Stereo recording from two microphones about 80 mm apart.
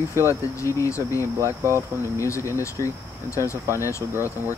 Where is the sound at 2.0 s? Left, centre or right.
Left.